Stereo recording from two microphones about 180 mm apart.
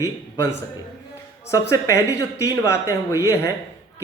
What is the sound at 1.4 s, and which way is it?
Speech, 15° left (ahead or behind).